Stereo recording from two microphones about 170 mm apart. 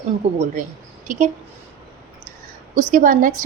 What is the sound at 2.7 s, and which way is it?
Speech, 45° right (ahead or behind).